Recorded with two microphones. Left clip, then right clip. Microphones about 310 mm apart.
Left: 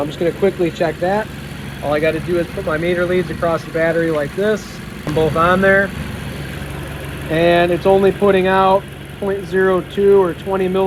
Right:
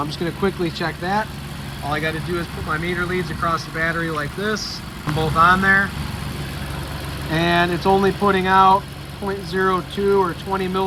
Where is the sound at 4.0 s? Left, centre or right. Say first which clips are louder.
Left 7 dB; left.